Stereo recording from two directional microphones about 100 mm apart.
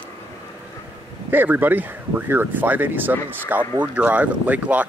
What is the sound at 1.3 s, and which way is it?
Speech, 20° right (ahead or behind).